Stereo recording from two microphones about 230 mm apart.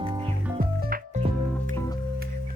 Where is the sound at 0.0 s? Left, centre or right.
Right.